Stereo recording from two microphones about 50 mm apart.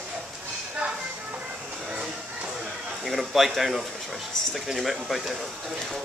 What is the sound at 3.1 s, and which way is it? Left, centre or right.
Speech, centre.